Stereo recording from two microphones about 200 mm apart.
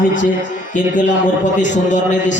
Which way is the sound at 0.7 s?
40° left (ahead or behind).